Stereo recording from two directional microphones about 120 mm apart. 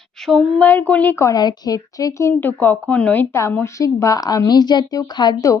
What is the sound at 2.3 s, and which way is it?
A woman's voice, 15° left (ahead or behind).